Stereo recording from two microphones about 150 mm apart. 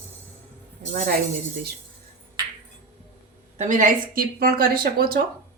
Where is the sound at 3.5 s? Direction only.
55° right (ahead or behind).